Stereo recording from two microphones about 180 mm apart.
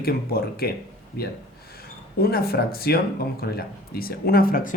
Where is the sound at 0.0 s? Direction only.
60° left (ahead or behind).